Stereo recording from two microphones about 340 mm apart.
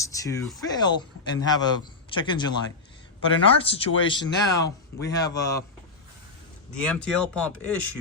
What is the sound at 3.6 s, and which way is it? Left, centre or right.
Speech, centre.